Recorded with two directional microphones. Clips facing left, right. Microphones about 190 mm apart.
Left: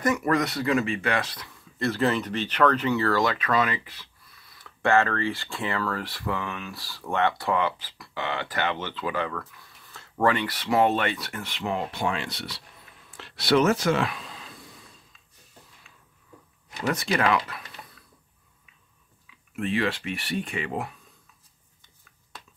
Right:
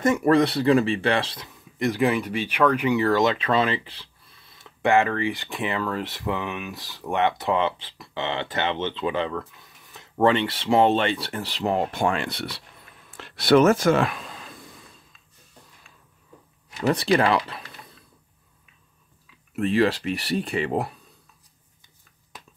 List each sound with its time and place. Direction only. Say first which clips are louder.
0.0 s speech: right 5 dB; 25° right (ahead or behind); by 14.5 s 50° right (ahead or behind)
16.8 s speech: right 5 dB; 35° right (ahead or behind)
19.5 s speech: right 6 dB; 40° right (ahead or behind)